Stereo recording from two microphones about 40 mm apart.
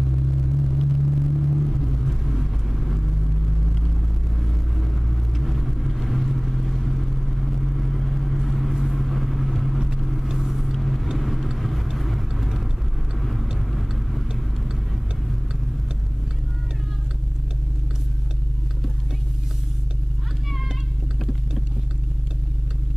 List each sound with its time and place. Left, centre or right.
0.0 s vehicle: centre